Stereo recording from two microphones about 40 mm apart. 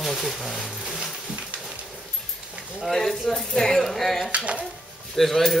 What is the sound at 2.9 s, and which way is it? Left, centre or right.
Speech, centre.